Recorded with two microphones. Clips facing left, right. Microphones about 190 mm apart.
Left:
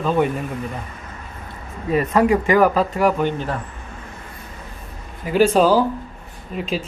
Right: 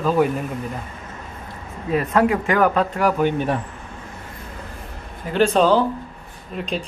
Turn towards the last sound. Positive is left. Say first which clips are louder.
# left 2 dB
turn(degrees=5)  # may be behind; listen again after turning